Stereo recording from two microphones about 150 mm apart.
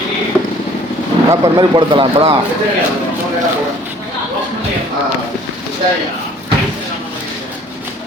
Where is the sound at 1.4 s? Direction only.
30° right (ahead or behind).